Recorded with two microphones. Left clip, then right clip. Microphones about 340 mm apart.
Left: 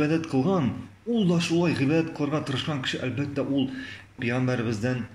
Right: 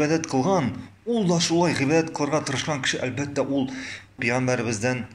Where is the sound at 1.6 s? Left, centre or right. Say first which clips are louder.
Right 3 dB; centre.